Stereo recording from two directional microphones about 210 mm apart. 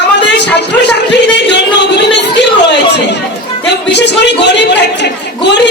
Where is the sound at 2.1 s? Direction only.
55° left (ahead or behind).